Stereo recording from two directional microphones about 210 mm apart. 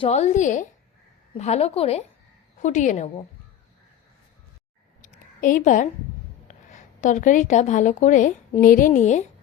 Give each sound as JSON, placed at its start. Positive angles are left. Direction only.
{"t": 0.0, "sound": "a woman's voice", "side_deg": 30}
{"t": 5.0, "sound": "a sound", "side_deg": 40}
{"t": 6.5, "sound": "speech", "side_deg": 35}